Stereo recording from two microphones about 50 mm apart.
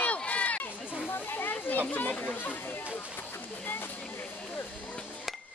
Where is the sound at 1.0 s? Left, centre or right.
Left.